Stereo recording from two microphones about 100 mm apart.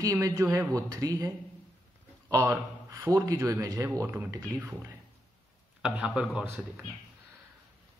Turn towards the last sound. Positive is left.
turn(degrees=-10)  # may be behind; listen again after turning